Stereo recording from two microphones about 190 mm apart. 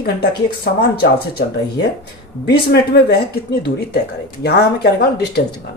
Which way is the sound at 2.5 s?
55° left (ahead or behind).